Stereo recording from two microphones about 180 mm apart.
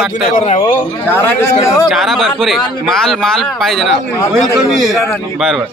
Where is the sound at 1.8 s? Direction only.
Centre (ahead or behind).